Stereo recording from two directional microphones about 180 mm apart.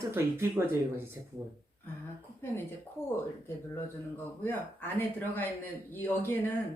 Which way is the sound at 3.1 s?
15° left (ahead or behind).